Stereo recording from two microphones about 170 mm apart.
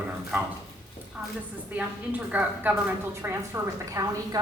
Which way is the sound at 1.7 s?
10° right (ahead or behind).